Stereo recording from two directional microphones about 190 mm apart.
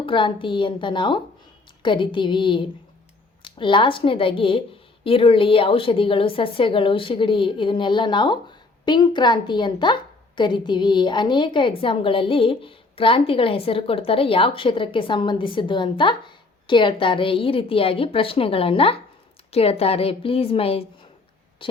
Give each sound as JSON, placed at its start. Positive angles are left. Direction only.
{"t": 0.0, "sound": "a woman's voice", "side_deg": 25}